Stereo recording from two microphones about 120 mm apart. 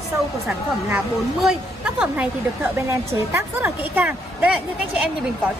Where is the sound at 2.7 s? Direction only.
20° right (ahead or behind).